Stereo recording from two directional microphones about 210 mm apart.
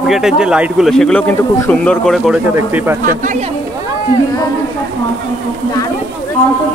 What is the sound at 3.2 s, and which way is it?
Speech, 35° right (ahead or behind).